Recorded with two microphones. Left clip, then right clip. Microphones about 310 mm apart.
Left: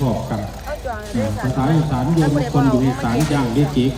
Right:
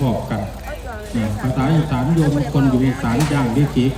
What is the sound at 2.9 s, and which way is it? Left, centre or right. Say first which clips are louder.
Speech: left 1 dB; centre.